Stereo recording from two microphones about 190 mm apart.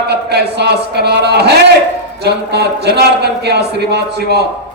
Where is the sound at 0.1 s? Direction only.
60° right (ahead or behind).